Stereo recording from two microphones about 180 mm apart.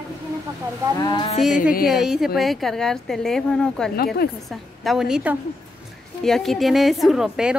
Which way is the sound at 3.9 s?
60° left (ahead or behind).